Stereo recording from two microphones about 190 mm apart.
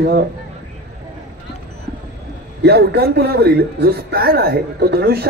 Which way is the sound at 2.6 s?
60° right (ahead or behind).